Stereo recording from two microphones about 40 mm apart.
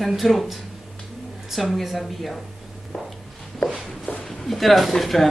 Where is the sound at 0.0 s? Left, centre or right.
Centre.